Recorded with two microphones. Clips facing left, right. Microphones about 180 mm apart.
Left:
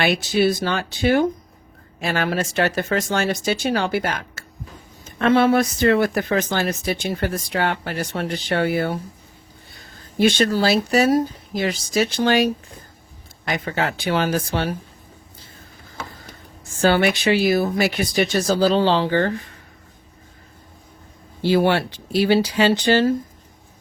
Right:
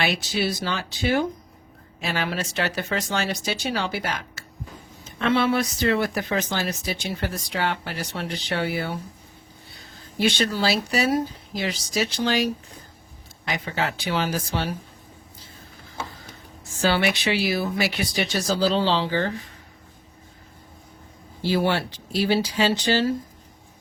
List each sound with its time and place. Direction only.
0.0 s speech: 50° left (ahead or behind)
10.2 s speech: 50° left (ahead or behind)
16.8 s speech: 50° left (ahead or behind)
21.4 s speech: 60° left (ahead or behind)